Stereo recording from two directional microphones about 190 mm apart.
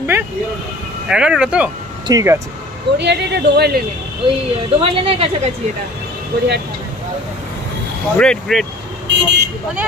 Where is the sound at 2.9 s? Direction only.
65° right (ahead or behind).